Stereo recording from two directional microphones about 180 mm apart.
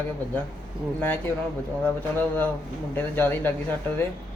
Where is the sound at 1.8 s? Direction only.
10° left (ahead or behind).